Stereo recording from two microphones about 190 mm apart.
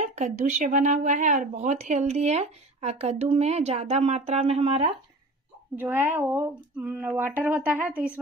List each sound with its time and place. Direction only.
0.0 s speech: 35° right (ahead or behind)
5.8 s speech: 10° right (ahead or behind)